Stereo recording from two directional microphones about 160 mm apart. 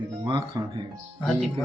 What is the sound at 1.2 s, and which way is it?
Speech, 5° left (ahead or behind).